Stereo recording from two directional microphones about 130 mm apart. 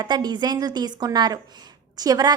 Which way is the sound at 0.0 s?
30° right (ahead or behind).